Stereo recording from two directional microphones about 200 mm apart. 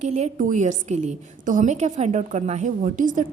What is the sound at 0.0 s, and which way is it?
A woman's voice, 35° right (ahead or behind).